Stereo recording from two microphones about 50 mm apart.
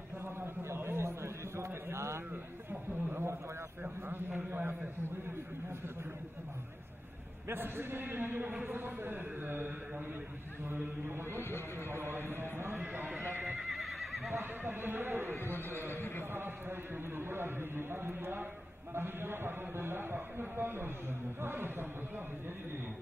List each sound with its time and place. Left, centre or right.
0.2 s a sound: right
2.7 s a sound: right
4.5 s a man's voice: right
7.4 s a man's voice: right
11.9 s horse: right
12.8 s horse: right
13.6 s neigh: centre
14.3 s a sound: right
15.9 s neigh: left
16.3 s a man's voice: right